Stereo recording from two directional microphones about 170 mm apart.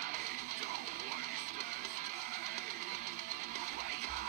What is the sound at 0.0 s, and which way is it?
Music, 45° right (ahead or behind).